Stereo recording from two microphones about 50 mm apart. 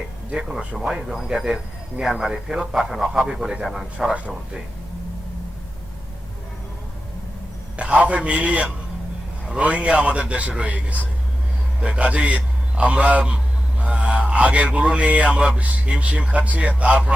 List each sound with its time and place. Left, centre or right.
0.6 s a man's voice: right
3.9 s a man's voice: right
7.8 s a man's voice: right